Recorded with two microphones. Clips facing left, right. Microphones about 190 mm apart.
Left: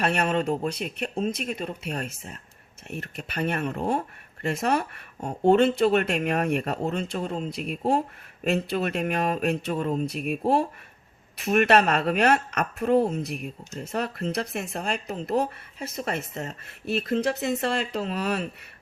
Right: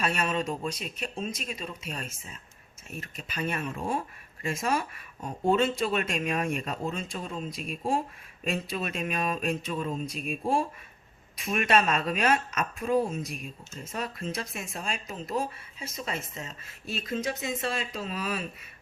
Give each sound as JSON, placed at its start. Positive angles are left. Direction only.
{"t": 0.0, "sound": "speech", "side_deg": 60}